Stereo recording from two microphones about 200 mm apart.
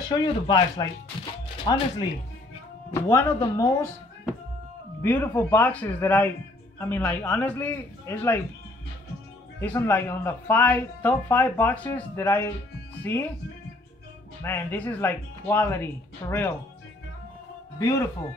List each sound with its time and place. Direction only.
0.1 s speech: 20° left (ahead or behind)
5.0 s speech: 10° left (ahead or behind)
9.6 s speech: 10° left (ahead or behind)
14.4 s speech: 10° left (ahead or behind)
17.7 s speech: 15° left (ahead or behind)